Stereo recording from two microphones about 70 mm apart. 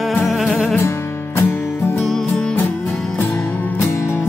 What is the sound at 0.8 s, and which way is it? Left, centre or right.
Music, left.